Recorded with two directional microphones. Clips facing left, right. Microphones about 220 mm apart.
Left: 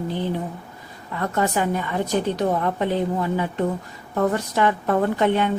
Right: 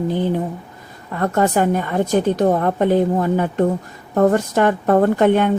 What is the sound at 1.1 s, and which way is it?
A woman's voice, 50° right (ahead or behind).